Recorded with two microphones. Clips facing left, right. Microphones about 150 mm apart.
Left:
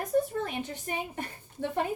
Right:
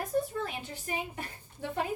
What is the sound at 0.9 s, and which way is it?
Speech, 35° left (ahead or behind).